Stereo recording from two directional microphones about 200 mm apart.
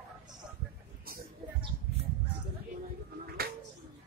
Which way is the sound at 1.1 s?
50° right (ahead or behind).